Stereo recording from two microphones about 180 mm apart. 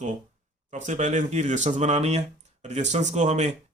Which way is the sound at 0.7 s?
40° right (ahead or behind).